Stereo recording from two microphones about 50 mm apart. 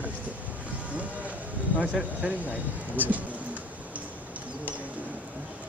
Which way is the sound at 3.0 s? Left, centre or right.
Right.